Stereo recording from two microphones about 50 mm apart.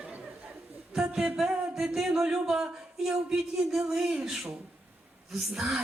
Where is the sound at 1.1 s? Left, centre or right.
Centre.